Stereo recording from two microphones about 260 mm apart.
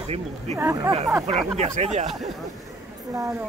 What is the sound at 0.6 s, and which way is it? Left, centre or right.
Speech, centre.